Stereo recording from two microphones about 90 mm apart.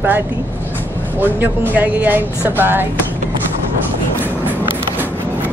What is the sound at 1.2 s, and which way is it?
Speech, 20° right (ahead or behind).